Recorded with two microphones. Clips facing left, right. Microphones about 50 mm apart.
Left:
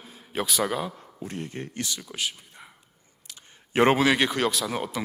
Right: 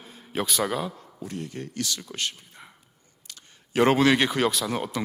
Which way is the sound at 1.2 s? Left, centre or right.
Left.